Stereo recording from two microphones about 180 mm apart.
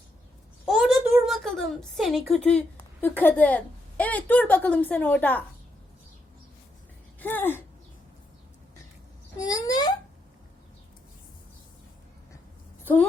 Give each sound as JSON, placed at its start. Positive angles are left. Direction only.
{"t": 0.6, "sound": "a woman's voice", "side_deg": 0}
{"t": 7.2, "sound": "speech", "side_deg": 10}
{"t": 9.4, "sound": "a child's voice", "side_deg": 20}
{"t": 12.8, "sound": "a sound", "side_deg": 10}